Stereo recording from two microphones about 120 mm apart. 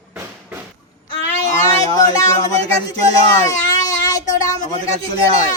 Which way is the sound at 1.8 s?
30° left (ahead or behind).